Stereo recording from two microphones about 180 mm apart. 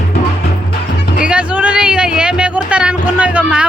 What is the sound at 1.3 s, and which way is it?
Music, 5° right (ahead or behind).